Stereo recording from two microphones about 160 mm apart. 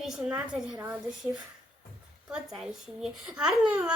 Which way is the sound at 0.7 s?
15° right (ahead or behind).